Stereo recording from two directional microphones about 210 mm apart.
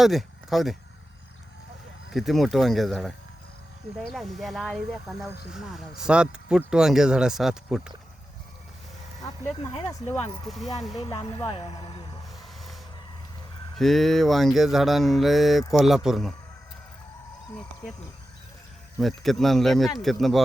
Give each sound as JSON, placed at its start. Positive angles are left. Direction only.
{"t": 0.0, "sound": "speech", "side_deg": 0}
{"t": 2.0, "sound": "mantra", "side_deg": 0}
{"t": 4.1, "sound": "mantra", "side_deg": 0}
{"t": 9.2, "sound": "speech", "side_deg": 20}
{"t": 13.7, "sound": "mantra", "side_deg": 0}
{"t": 18.9, "sound": "mantra", "side_deg": 0}